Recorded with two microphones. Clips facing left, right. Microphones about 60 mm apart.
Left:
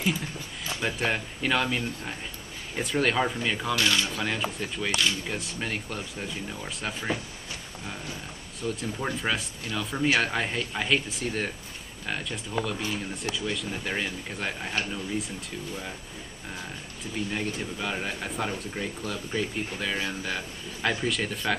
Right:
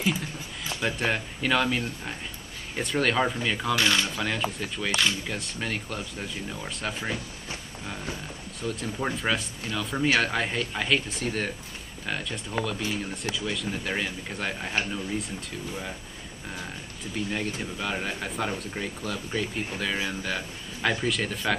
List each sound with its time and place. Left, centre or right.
0.8 s speech: centre
3.8 s speech: right
4.0 s speech: centre
8.6 s speech: centre
16.5 s speech: centre